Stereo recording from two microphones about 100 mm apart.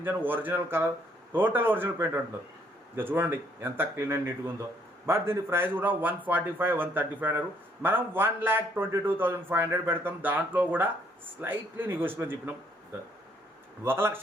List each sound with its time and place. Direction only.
0.0 s a man's voice: 20° right (ahead or behind)
13.8 s a man's voice: 25° right (ahead or behind)